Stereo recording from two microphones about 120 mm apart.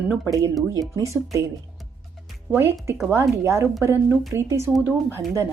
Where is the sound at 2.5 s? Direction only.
20° right (ahead or behind).